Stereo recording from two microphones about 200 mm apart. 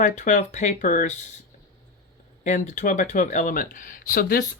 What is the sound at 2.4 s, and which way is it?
Speech, 35° left (ahead or behind).